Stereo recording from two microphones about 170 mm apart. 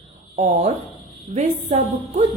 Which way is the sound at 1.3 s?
45° right (ahead or behind).